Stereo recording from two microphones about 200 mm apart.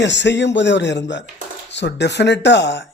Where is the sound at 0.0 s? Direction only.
60° left (ahead or behind).